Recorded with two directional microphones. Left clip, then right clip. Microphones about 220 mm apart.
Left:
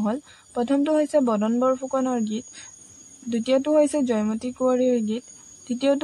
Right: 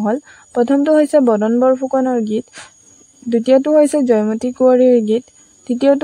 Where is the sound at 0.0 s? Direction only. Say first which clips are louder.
Right 9 dB; 35° right (ahead or behind).